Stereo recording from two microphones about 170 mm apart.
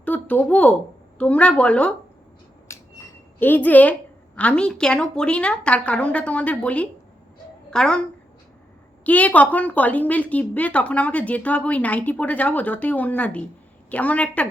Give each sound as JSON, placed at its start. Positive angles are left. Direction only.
{"t": 0.0, "sound": "a woman's voice", "side_deg": 10}
{"t": 2.7, "sound": "a sound", "side_deg": 15}
{"t": 3.3, "sound": "a woman's voice", "side_deg": 10}
{"t": 9.0, "sound": "a woman's voice", "side_deg": 10}